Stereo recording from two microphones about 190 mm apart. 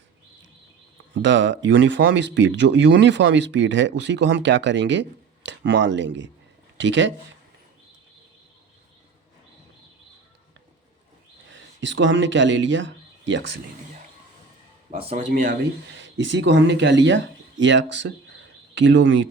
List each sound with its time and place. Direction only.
1.1 s speech: 70° right (ahead or behind)
11.5 s speech: 75° right (ahead or behind)
14.8 s speech: 35° right (ahead or behind)
16.0 s speech: 75° right (ahead or behind)